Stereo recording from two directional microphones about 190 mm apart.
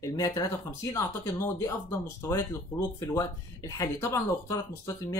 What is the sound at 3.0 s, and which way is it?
Speech, 20° left (ahead or behind).